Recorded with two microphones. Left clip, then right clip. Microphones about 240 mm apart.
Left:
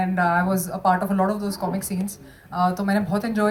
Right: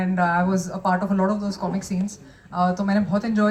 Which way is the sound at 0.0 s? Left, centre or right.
Left.